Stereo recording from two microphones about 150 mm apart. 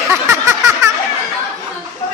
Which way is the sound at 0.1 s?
20° right (ahead or behind).